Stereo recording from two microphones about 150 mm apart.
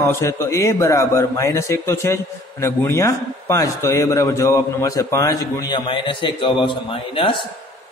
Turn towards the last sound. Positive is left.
turn(degrees=35)  # may be behind; listen again after turning